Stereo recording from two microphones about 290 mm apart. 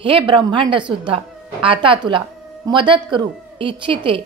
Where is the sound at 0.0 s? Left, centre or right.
Centre.